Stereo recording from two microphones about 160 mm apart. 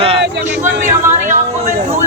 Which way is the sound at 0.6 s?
50° right (ahead or behind).